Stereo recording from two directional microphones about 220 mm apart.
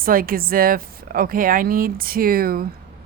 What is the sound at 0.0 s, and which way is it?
Speech, 40° right (ahead or behind).